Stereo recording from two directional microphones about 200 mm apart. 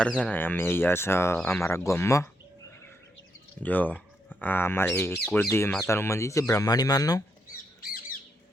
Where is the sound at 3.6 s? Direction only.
10° left (ahead or behind).